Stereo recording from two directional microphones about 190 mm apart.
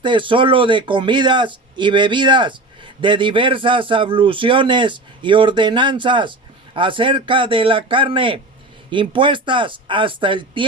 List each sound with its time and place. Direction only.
0.0 s a man's voice: 25° right (ahead or behind)